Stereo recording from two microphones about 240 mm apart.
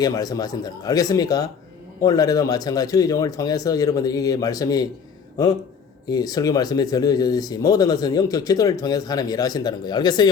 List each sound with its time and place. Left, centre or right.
0.0 s speech: centre
6.1 s speech: centre